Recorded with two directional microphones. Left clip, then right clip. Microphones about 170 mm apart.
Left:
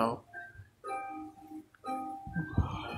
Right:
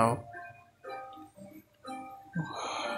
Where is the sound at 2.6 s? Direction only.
10° right (ahead or behind).